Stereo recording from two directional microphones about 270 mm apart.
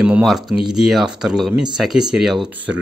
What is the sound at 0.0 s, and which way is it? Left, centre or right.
A man's voice, centre.